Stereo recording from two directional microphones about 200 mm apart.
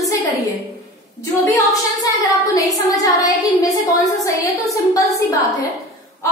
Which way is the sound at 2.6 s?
15° left (ahead or behind).